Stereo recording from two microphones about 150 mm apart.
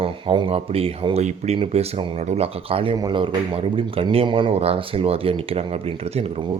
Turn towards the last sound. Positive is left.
turn(degrees=-40)  # may be behind; listen again after turning